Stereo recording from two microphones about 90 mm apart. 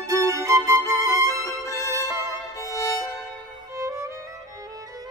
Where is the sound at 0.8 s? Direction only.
35° left (ahead or behind).